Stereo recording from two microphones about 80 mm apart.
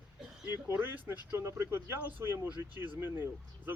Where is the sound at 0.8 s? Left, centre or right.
Right.